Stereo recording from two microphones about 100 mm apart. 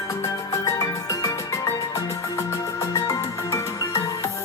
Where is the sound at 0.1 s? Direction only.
30° left (ahead or behind).